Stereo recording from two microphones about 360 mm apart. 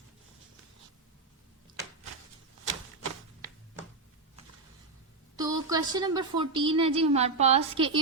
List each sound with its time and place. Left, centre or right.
5.4 s a woman's voice: centre